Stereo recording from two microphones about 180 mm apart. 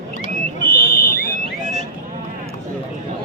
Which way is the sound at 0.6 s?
50° left (ahead or behind).